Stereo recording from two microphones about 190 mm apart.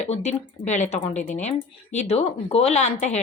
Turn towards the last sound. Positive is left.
turn(degrees=35)  # may be behind; listen again after turning